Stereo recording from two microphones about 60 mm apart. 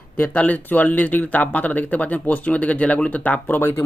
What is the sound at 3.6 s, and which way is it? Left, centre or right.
Speech, left.